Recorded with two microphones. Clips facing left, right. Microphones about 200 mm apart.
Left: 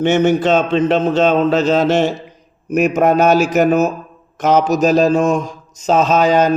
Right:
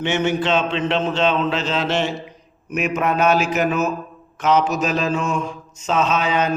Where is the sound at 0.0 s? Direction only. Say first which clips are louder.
Left 7 dB; 45° left (ahead or behind).